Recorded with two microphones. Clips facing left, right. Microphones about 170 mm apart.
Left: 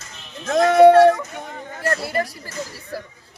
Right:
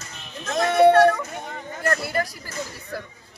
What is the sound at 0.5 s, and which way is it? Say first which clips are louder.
Speech: left 5 dB; 90° left.